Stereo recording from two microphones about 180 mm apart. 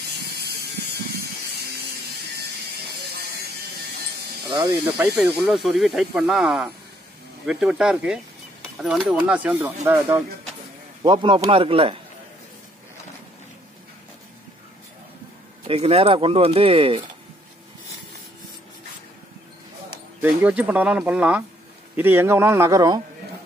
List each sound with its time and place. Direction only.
0.3 s mechanisms: 60° right (ahead or behind)
4.5 s speech: 25° right (ahead or behind)
4.8 s speech: 10° right (ahead or behind)
11.0 s speech: 25° right (ahead or behind)
15.6 s speech: 35° right (ahead or behind)
20.2 s speech: 5° right (ahead or behind)